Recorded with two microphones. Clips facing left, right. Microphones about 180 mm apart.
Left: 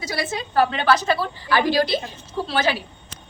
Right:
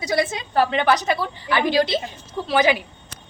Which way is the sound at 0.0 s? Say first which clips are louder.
Right 5 dB; 20° right (ahead or behind).